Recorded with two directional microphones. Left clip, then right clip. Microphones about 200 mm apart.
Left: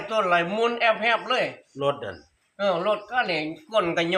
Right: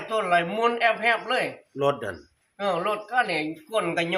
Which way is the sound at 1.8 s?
60° right (ahead or behind).